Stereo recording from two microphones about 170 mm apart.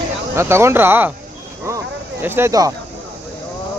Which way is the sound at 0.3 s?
15° right (ahead or behind).